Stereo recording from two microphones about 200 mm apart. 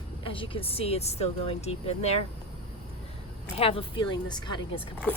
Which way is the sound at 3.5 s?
30° left (ahead or behind).